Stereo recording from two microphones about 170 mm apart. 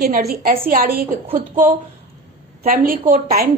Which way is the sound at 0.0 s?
65° right (ahead or behind).